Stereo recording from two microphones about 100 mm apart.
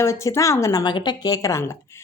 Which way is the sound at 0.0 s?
30° left (ahead or behind).